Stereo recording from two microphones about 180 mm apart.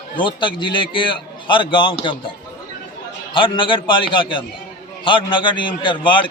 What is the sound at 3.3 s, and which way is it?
A man's voice, 30° left (ahead or behind).